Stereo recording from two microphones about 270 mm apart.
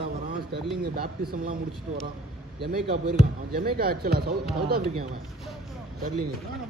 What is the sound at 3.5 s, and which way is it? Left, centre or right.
Speech, right.